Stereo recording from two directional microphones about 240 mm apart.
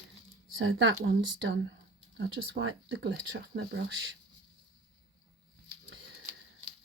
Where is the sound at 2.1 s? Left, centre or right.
Right.